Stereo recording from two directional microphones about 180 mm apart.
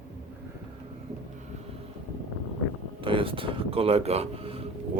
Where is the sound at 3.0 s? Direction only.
30° right (ahead or behind).